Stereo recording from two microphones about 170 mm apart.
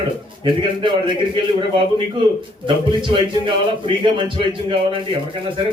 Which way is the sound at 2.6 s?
30° right (ahead or behind).